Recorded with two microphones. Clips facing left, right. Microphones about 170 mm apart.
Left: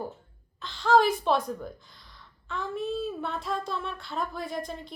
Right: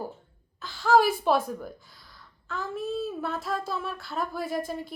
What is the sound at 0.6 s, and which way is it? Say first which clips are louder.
A woman's voice: right 1 dB; 5° right (ahead or behind).